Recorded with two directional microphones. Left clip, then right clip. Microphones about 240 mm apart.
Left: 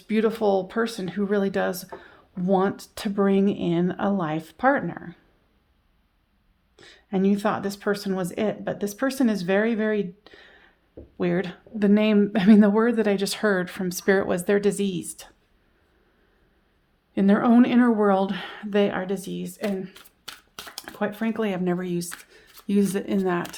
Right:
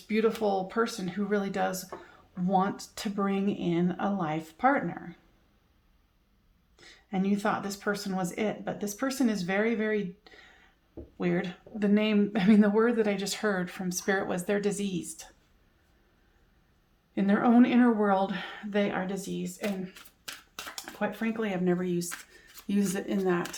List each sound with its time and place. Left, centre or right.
0.1 s speech: left
6.7 s speech: left
17.2 s speech: left